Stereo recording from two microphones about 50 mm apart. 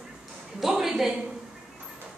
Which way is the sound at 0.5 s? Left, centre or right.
Centre.